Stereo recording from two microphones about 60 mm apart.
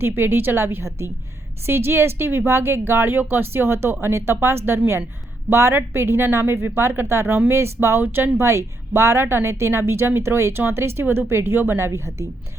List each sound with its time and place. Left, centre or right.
0.0 s a woman's voice: right